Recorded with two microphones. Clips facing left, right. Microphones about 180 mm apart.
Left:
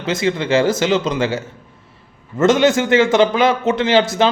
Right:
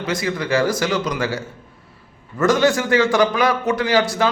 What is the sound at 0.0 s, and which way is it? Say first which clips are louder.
Speech: left 4 dB; 25° left (ahead or behind).